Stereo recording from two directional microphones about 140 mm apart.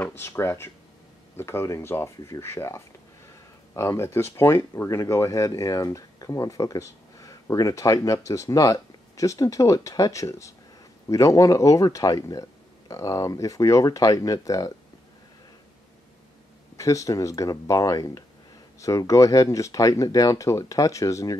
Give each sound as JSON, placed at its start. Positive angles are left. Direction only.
{"t": 0.0, "sound": "speech", "side_deg": 15}
{"t": 16.7, "sound": "speech", "side_deg": 20}